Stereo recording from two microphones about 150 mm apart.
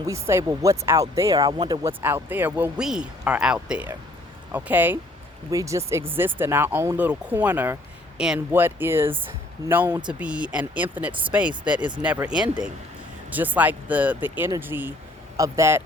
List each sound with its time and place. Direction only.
0.1 s speech: 20° right (ahead or behind)
2.0 s speech: 15° right (ahead or behind)